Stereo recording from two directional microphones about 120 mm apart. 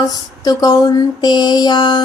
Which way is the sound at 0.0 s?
35° left (ahead or behind).